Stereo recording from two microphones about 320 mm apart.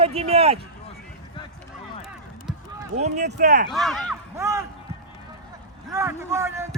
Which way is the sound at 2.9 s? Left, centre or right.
Right.